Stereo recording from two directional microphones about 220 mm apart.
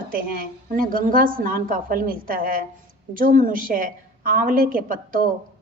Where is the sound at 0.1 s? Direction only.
40° right (ahead or behind).